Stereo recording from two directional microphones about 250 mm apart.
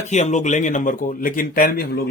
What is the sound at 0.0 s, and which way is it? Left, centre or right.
Speech, left.